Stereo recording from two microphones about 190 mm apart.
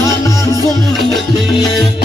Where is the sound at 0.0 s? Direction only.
15° left (ahead or behind).